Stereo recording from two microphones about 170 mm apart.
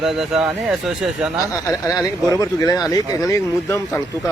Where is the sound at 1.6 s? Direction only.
20° left (ahead or behind).